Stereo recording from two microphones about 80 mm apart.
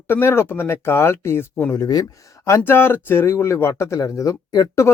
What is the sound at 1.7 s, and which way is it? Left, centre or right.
Speech, left.